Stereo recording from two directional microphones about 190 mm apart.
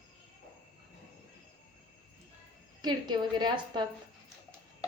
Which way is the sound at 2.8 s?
20° right (ahead or behind).